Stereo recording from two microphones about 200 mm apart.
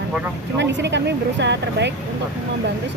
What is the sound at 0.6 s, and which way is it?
Speech, 65° right (ahead or behind).